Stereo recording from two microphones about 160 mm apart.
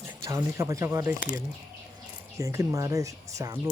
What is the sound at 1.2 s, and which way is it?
Speech, 55° left (ahead or behind).